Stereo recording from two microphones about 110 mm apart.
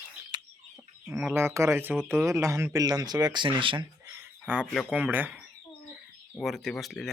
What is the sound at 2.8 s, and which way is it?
Speech, 35° right (ahead or behind).